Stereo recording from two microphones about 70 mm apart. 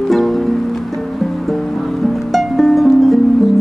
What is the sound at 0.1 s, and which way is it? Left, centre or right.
Music, centre.